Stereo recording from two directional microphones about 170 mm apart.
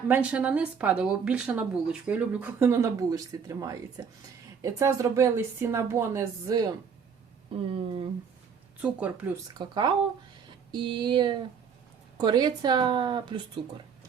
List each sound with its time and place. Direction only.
0.1 s speech: 10° right (ahead or behind)
7.5 s speech: 35° right (ahead or behind)
8.8 s speech: 10° right (ahead or behind)
9.6 s a woman's voice: 25° right (ahead or behind)